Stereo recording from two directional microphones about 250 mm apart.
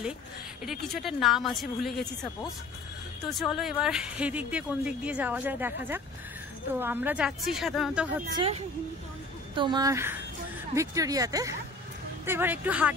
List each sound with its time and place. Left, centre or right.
0.7 s speech: centre
3.3 s speech: centre
8.4 s speech: right; by 12.9 s centre